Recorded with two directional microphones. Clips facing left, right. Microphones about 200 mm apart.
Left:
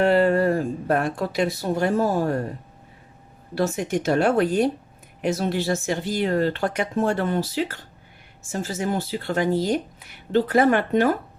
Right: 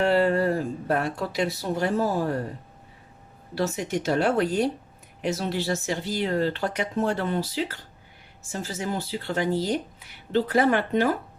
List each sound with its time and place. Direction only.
0.0 s speech: 55° left (ahead or behind)
3.5 s speech: 50° left (ahead or behind)
8.6 s speech: 50° left (ahead or behind)